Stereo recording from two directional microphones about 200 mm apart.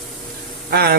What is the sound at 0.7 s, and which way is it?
Speech, 50° right (ahead or behind).